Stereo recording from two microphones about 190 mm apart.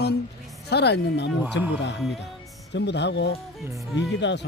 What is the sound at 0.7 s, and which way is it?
Speech, 60° left (ahead or behind).